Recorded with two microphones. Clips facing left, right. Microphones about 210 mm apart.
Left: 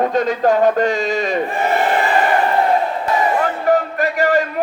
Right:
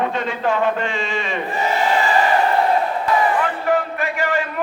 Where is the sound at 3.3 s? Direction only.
40° left (ahead or behind).